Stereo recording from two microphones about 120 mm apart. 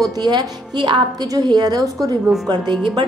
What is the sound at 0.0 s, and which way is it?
A woman's voice, 35° right (ahead or behind).